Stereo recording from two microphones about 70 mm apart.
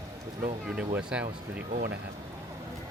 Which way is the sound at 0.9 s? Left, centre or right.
Centre.